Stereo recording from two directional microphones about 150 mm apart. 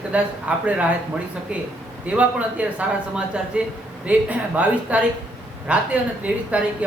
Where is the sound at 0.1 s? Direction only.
10° right (ahead or behind).